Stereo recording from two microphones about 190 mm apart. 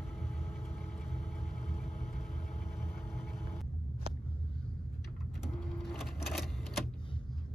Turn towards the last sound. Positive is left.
turn(degrees=0)  # may be behind; listen again after turning